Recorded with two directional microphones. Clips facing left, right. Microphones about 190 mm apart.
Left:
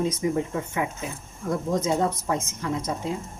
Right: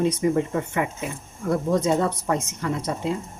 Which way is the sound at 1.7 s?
65° right (ahead or behind).